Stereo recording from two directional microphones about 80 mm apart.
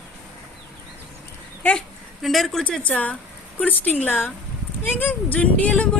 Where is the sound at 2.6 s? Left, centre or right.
Centre.